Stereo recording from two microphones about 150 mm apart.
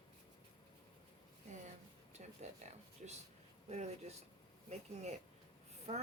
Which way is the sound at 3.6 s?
50° right (ahead or behind).